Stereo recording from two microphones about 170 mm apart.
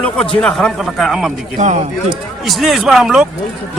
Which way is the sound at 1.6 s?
45° right (ahead or behind).